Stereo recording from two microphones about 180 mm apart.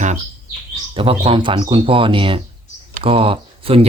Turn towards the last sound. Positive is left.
turn(degrees=-30)  # may be behind; listen again after turning